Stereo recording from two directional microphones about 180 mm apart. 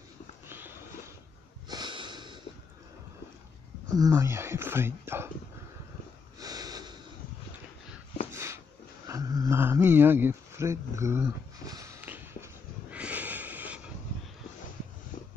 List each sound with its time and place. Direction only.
0.5 s a sound: 10° right (ahead or behind)
1.7 s wheeze: 25° right (ahead or behind)
3.9 s speech: 20° right (ahead or behind)
6.4 s snort: 20° right (ahead or behind)
8.3 s a sound: 15° right (ahead or behind)
12.9 s snort: 10° right (ahead or behind)